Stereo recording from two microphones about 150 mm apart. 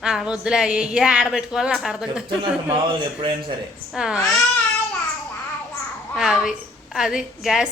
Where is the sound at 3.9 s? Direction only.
5° right (ahead or behind).